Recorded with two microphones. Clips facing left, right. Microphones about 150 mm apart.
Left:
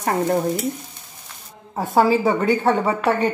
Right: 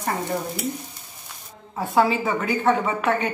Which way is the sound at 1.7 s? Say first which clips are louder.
Left 3 dB; 40° left (ahead or behind).